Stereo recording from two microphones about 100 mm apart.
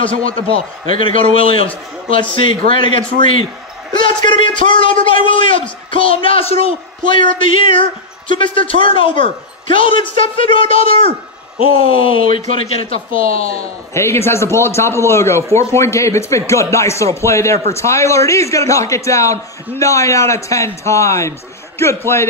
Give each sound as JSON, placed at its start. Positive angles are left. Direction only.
{"t": 0.9, "sound": "a man's voice", "side_deg": 65}
{"t": 2.3, "sound": "a man's voice", "side_deg": 60}
{"t": 13.9, "sound": "speech", "side_deg": 25}